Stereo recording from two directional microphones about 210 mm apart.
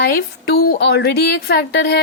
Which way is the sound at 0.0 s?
45° left (ahead or behind).